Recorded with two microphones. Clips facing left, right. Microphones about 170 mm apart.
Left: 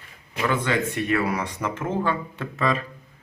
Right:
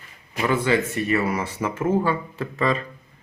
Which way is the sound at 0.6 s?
5° right (ahead or behind).